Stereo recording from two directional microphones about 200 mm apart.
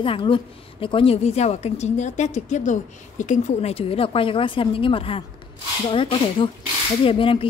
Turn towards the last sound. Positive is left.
turn(degrees=25)  # may be behind; listen again after turning